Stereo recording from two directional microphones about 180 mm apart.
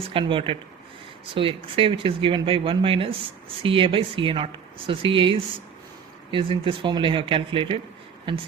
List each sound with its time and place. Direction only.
0.0 s speech: 30° right (ahead or behind)